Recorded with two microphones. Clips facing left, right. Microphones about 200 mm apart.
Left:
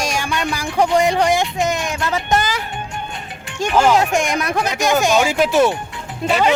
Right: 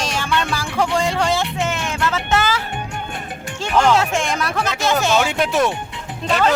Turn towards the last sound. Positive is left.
turn(degrees=10)  # may be behind; listen again after turning